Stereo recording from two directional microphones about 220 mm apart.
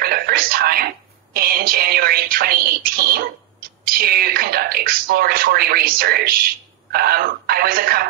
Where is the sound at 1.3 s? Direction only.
40° right (ahead or behind).